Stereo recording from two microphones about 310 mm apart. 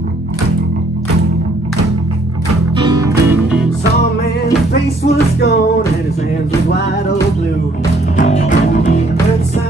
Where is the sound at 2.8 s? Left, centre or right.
Centre.